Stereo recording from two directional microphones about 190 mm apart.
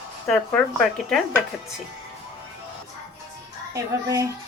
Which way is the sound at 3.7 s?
15° right (ahead or behind).